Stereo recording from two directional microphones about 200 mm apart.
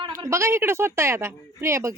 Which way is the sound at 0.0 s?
20° right (ahead or behind).